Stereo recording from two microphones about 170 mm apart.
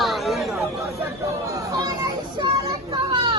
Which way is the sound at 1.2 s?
20° right (ahead or behind).